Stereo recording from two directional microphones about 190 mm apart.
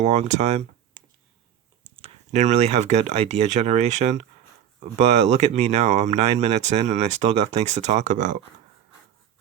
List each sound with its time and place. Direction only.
0.0 s speech: 35° right (ahead or behind)